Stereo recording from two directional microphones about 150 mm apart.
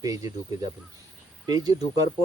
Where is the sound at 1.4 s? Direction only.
25° right (ahead or behind).